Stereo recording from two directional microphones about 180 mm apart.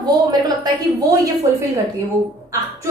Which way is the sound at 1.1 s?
20° right (ahead or behind).